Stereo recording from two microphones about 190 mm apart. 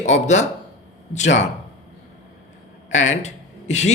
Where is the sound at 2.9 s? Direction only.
40° left (ahead or behind).